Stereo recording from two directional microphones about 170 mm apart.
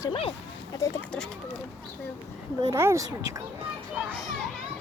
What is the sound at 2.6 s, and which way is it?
Speech, 15° right (ahead or behind).